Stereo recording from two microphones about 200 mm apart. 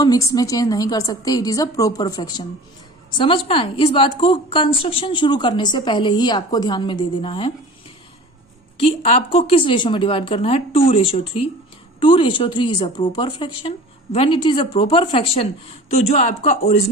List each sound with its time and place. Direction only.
0.0 s a woman's voice: 15° left (ahead or behind)
8.8 s speech: 30° left (ahead or behind)